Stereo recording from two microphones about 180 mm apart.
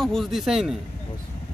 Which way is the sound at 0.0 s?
Centre (ahead or behind).